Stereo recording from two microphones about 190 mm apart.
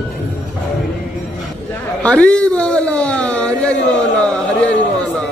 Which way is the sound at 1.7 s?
5° left (ahead or behind).